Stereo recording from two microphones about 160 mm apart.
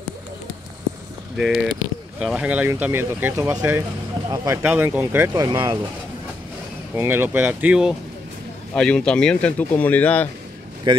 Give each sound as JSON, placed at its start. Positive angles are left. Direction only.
{"t": 1.3, "sound": "speech", "side_deg": -5}
{"t": 5.3, "sound": "speech", "side_deg": -25}
{"t": 7.0, "sound": "speech", "side_deg": -15}
{"t": 8.7, "sound": "speech", "side_deg": 5}